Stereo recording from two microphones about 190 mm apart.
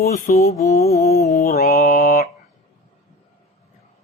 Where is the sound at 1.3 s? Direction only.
40° left (ahead or behind).